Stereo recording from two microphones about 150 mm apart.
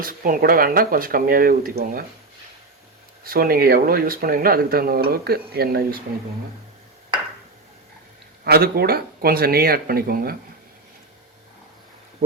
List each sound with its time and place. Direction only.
0.0 s speech: 70° right (ahead or behind)
3.2 s speech: 75° right (ahead or behind)
8.4 s speech: 90° right